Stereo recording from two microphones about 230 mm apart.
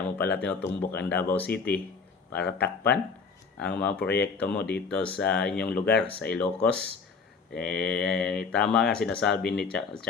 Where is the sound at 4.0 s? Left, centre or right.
Left.